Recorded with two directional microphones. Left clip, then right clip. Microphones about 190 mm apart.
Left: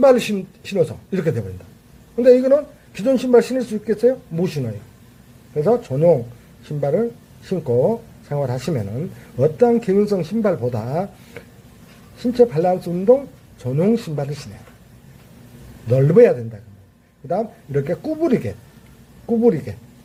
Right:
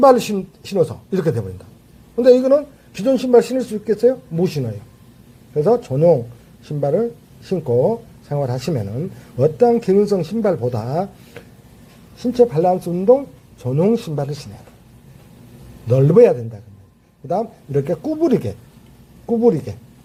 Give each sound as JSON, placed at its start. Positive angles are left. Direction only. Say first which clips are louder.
{"t": 0.0, "sound": "speech", "louder": "right 2 dB", "side_deg": -5}
{"t": 15.9, "sound": "speech", "louder": "right 1 dB", "side_deg": -5}